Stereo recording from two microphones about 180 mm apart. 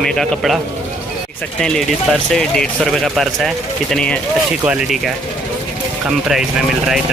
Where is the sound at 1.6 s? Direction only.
5° left (ahead or behind).